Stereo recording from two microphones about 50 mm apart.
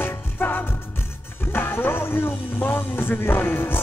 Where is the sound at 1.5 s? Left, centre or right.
Left.